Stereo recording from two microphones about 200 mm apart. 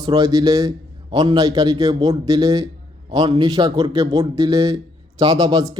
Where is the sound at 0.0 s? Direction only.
20° right (ahead or behind).